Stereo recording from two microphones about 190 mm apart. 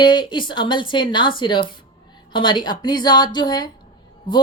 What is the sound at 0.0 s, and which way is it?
A woman's voice, 25° left (ahead or behind).